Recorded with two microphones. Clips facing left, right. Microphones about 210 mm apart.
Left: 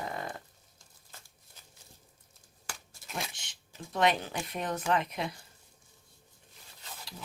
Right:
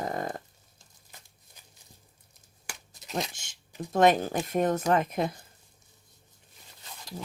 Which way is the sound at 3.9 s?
45° right (ahead or behind).